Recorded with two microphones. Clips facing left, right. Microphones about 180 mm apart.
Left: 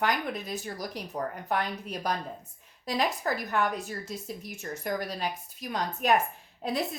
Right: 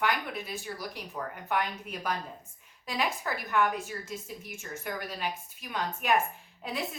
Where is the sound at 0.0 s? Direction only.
40° left (ahead or behind).